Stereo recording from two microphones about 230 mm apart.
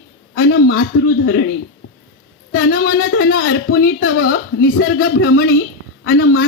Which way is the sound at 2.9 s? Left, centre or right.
Left.